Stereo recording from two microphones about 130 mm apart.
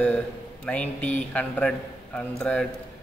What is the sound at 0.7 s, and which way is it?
A man's voice, 10° left (ahead or behind).